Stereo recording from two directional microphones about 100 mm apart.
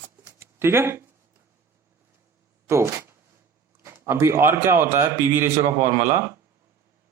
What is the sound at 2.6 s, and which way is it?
A man's voice, 25° right (ahead or behind).